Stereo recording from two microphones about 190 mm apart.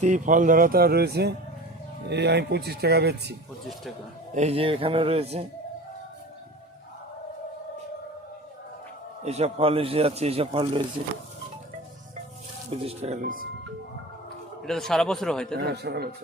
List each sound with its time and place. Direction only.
0.0 s speech: 40° right (ahead or behind); by 3.3 s 60° right (ahead or behind)
4.4 s a man's voice: 35° right (ahead or behind)
9.2 s a man's voice: 35° right (ahead or behind)
12.8 s a man's voice: 30° right (ahead or behind)
14.6 s a man's voice: centre (ahead or behind)
15.5 s speech: 60° right (ahead or behind)